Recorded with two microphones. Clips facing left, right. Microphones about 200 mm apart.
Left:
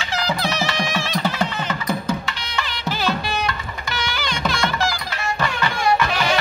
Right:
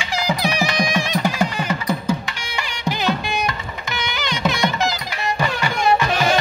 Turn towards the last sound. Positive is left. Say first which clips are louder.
# right 2 dB
turn(degrees=-20)  # may be behind; listen again after turning